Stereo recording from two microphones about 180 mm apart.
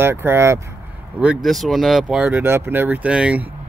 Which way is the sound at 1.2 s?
5° right (ahead or behind).